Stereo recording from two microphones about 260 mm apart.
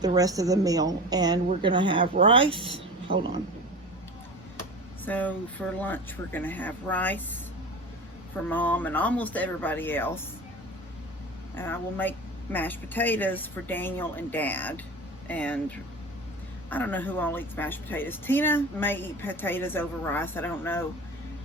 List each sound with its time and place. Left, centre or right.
0.0 s a woman's voice: centre
5.0 s a woman's voice: centre
8.4 s a woman's voice: centre
11.5 s a woman's voice: centre
16.6 s a woman's voice: centre